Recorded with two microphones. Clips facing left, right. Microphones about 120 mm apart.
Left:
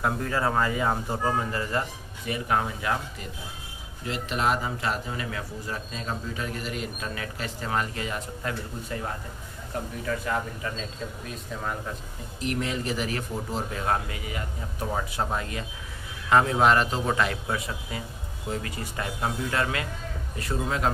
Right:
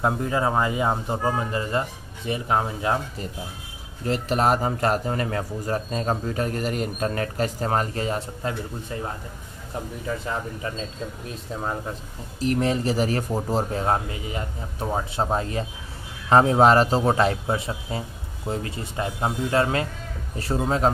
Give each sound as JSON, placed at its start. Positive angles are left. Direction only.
{"t": 0.0, "sound": "speech", "side_deg": -20}
{"t": 4.0, "sound": "speech", "side_deg": -40}
{"t": 12.4, "sound": "speech", "side_deg": -35}